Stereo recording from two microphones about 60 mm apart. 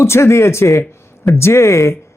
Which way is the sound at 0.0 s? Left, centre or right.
Left.